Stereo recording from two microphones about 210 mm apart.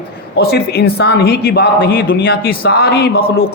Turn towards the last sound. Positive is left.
turn(degrees=45)  # may be behind; listen again after turning